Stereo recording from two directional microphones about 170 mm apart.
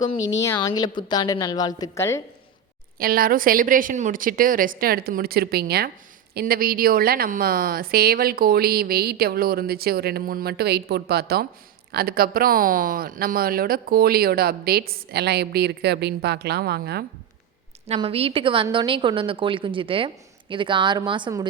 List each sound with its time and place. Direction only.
0.4 s a woman's voice: 20° left (ahead or behind)
3.0 s speech: 60° right (ahead or behind)
17.8 s a woman's voice: 35° right (ahead or behind)